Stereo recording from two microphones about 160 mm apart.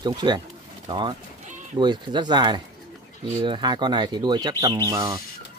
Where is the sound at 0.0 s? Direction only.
25° right (ahead or behind).